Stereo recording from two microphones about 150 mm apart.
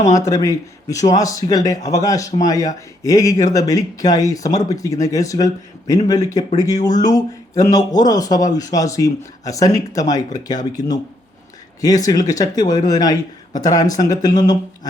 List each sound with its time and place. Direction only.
0.3 s speech: 20° left (ahead or behind)